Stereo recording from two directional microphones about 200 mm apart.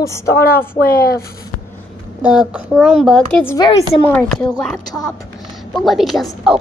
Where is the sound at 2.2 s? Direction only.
5° right (ahead or behind).